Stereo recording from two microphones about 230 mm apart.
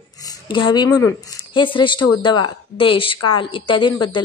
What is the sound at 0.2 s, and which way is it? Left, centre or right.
A woman's voice, centre.